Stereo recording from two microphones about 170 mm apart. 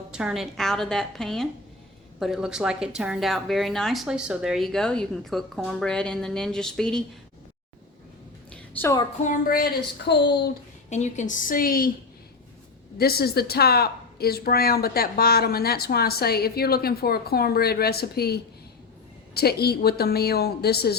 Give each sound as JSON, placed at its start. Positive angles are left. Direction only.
{"t": 0.1, "sound": "speech", "side_deg": -5}
{"t": 8.4, "sound": "a sound", "side_deg": 15}
{"t": 9.2, "sound": "a woman's voice", "side_deg": 55}
{"t": 10.1, "sound": "speech", "side_deg": 80}
{"t": 10.8, "sound": "a woman's voice", "side_deg": 45}
{"t": 13.0, "sound": "a woman's voice", "side_deg": 65}